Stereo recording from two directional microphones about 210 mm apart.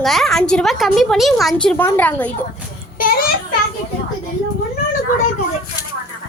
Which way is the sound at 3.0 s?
45° left (ahead or behind).